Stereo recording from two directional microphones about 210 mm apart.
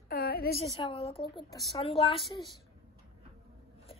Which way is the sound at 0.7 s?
25° left (ahead or behind).